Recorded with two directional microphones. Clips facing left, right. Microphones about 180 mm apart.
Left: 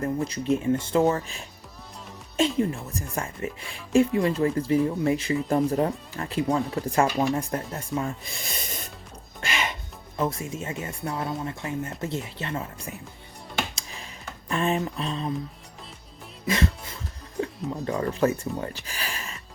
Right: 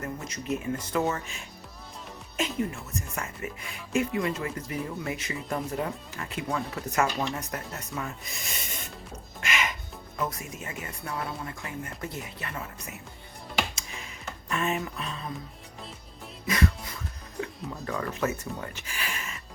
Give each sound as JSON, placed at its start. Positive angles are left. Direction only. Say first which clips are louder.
{"t": 0.0, "sound": "speech", "louder": "left 9 dB", "side_deg": 30}
{"t": 9.4, "sound": "music", "louder": "left 1 dB", "side_deg": 30}
{"t": 10.2, "sound": "speech", "louder": "left 6 dB", "side_deg": 25}
{"t": 13.7, "sound": "computer keyboard", "louder": "left 1 dB", "side_deg": 35}
{"t": 14.5, "sound": "speech", "louder": "left 4 dB", "side_deg": 30}
{"t": 16.5, "sound": "music", "louder": "left 2 dB", "side_deg": 25}
{"t": 17.4, "sound": "speech", "louder": "left 6 dB", "side_deg": 25}